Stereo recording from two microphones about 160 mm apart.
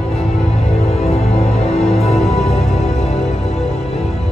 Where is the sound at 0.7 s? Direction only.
40° left (ahead or behind).